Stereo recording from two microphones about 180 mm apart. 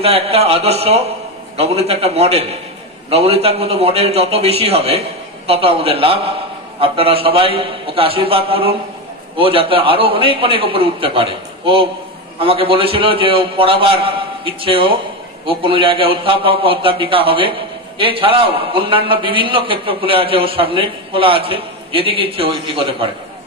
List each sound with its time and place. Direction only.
0.0 s a man's voice: 35° right (ahead or behind)